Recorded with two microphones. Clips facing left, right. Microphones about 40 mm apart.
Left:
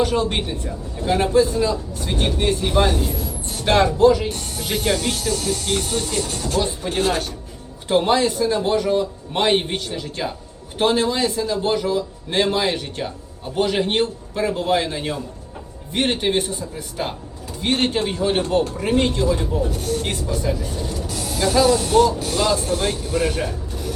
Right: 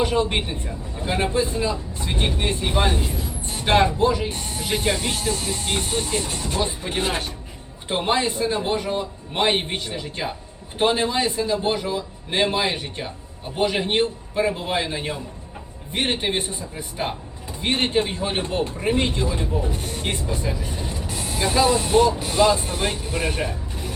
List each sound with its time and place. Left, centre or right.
0.0 s a man's voice: centre